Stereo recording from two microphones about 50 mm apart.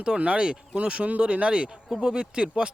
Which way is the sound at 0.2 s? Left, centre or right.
Right.